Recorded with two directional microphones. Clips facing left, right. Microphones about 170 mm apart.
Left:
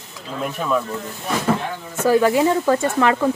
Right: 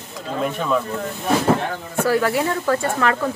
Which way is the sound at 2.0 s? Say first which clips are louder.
Left 3 dB; 15° left (ahead or behind).